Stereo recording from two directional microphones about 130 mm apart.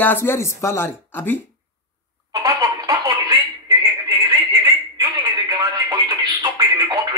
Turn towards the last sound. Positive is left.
turn(degrees=-25)  # may be behind; listen again after turning